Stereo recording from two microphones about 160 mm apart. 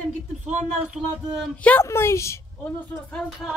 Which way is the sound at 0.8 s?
5° right (ahead or behind).